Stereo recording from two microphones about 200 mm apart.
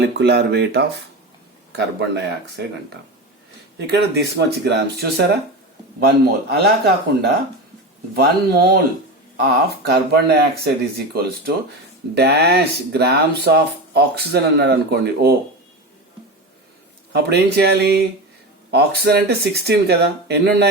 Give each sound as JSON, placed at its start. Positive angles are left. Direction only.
{"t": 0.0, "sound": "speech", "side_deg": -55}
{"t": 3.8, "sound": "speech", "side_deg": -55}
{"t": 9.4, "sound": "speech", "side_deg": -50}
{"t": 17.1, "sound": "speech", "side_deg": -55}